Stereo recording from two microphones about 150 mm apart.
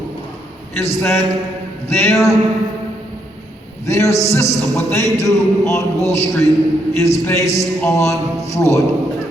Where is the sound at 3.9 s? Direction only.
20° left (ahead or behind).